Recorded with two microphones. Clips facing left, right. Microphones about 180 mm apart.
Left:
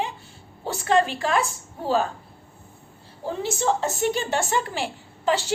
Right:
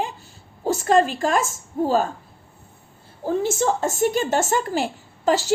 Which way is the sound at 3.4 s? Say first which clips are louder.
Even; 45° right (ahead or behind).